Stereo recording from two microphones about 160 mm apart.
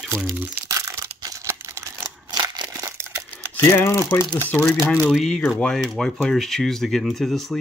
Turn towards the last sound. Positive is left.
turn(degrees=0)  # may be behind; listen again after turning